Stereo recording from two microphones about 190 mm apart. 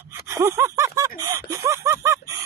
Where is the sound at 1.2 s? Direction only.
15° right (ahead or behind).